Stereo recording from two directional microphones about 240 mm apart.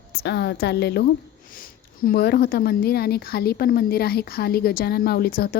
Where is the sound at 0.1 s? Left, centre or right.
Left.